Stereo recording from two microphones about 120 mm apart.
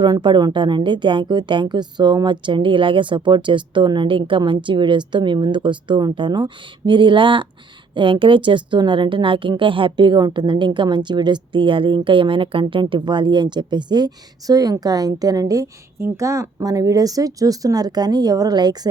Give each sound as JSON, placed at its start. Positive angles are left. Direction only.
{"t": 0.0, "sound": "a woman's voice", "side_deg": -40}